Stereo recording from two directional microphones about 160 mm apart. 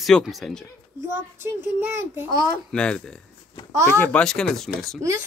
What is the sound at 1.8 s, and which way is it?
Speech, 15° right (ahead or behind).